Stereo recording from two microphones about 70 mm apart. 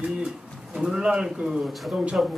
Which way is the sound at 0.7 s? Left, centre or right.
Centre.